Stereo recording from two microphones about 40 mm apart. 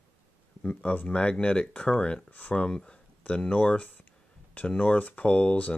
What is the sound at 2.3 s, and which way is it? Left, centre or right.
Speech, left.